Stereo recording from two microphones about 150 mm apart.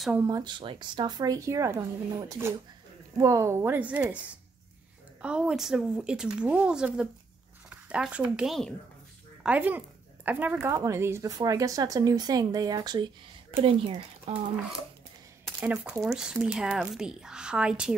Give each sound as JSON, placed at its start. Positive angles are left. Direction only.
{"t": 0.1, "sound": "speech", "side_deg": -20}
{"t": 0.4, "sound": "speech", "side_deg": -30}
{"t": 9.4, "sound": "speech", "side_deg": -10}
{"t": 15.6, "sound": "speech", "side_deg": -10}